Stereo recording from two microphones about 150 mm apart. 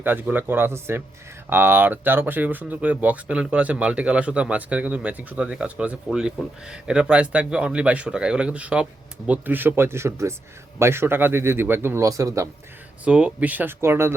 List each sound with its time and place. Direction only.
0.0 s speech: 15° right (ahead or behind)
13.1 s speech: 5° right (ahead or behind)